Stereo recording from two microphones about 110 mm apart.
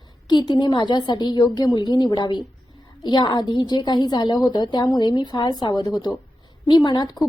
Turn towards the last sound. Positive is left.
turn(degrees=40)  # may be behind; listen again after turning